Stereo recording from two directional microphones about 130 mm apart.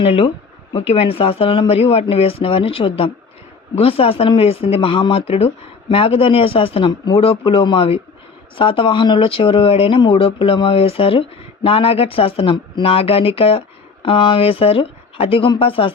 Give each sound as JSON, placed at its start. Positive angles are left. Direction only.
{"t": 0.0, "sound": "speech", "side_deg": 45}